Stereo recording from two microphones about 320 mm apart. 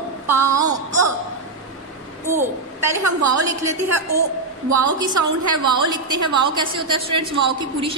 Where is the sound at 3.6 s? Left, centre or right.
Centre.